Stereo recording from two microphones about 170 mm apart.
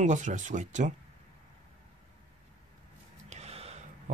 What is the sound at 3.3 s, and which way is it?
Gasp, 40° right (ahead or behind).